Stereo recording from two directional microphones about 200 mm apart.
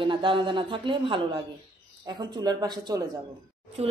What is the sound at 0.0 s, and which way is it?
A woman's voice, 25° right (ahead or behind).